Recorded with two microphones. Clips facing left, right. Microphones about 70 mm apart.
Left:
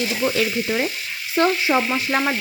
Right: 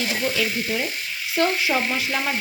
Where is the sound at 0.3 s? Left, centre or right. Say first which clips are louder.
Left 3 dB; left.